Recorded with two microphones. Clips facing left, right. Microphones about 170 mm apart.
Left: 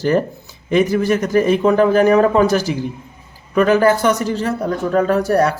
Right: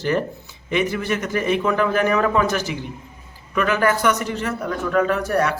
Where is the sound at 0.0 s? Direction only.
40° left (ahead or behind).